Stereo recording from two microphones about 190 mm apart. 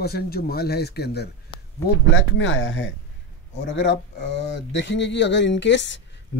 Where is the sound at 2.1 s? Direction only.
75° left (ahead or behind).